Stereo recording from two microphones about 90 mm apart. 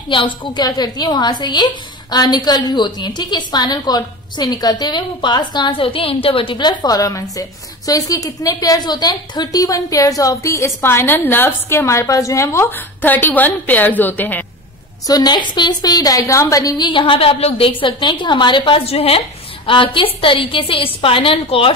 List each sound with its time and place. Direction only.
0.1 s a woman's voice: 65° left (ahead or behind); by 12.6 s 35° left (ahead or behind)
12.7 s a woman's voice: 20° left (ahead or behind)
15.0 s a woman's voice: 50° left (ahead or behind)
16.8 s a woman's voice: 70° left (ahead or behind); by 21.7 s 90° left